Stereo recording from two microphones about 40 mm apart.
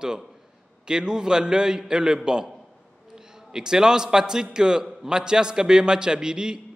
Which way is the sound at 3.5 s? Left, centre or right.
Centre.